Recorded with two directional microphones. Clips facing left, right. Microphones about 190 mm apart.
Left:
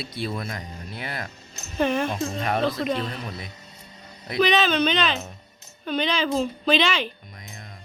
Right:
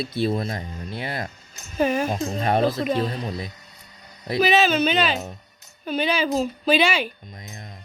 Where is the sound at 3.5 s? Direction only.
25° left (ahead or behind).